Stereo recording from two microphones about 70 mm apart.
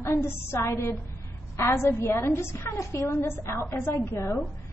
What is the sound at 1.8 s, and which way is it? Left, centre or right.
A woman's voice, left.